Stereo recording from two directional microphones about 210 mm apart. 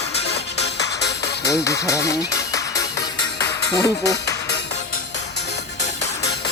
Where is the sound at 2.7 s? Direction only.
50° left (ahead or behind).